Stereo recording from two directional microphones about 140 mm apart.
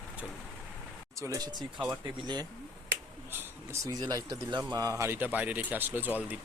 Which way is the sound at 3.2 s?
15° right (ahead or behind).